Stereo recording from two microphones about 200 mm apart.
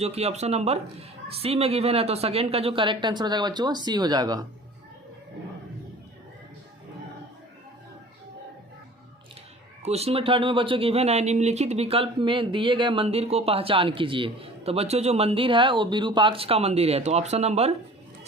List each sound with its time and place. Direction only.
0.0 s speech: 30° right (ahead or behind)
9.8 s speech: 30° right (ahead or behind)